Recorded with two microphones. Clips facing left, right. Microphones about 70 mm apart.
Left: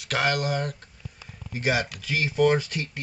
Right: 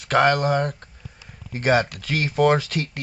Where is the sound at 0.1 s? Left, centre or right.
Right.